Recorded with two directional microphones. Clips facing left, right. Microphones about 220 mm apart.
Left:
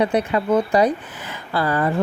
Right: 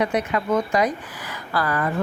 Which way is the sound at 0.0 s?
30° left (ahead or behind).